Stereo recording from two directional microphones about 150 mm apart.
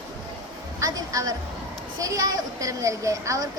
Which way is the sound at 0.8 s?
25° right (ahead or behind).